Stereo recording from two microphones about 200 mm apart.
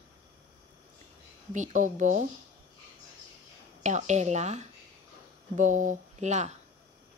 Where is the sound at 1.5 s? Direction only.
40° right (ahead or behind).